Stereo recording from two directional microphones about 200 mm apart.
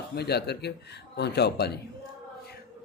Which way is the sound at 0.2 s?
55° left (ahead or behind).